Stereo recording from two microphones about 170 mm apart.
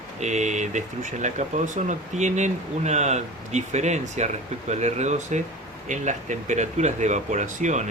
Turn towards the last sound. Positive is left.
turn(degrees=-45)  # may be behind; listen again after turning